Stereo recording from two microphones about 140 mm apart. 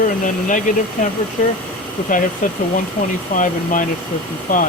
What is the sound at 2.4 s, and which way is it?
Speech, 65° left (ahead or behind).